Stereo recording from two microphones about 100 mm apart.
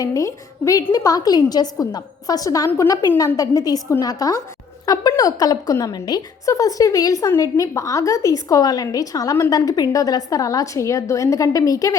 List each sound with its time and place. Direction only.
0.0 s a woman's voice: 35° left (ahead or behind)